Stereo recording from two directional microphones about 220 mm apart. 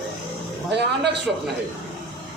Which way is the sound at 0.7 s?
50° right (ahead or behind).